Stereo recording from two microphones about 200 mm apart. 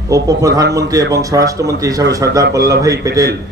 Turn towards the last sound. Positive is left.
turn(degrees=-15)  # may be behind; listen again after turning